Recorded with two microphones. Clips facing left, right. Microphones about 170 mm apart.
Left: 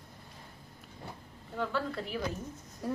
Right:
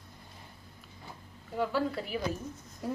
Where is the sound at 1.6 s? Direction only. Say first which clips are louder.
Right 3 dB; 5° right (ahead or behind).